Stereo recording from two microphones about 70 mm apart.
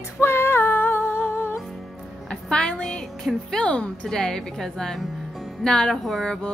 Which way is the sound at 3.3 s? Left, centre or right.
Centre.